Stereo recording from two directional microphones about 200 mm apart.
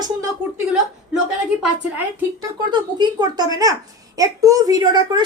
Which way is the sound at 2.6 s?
20° right (ahead or behind).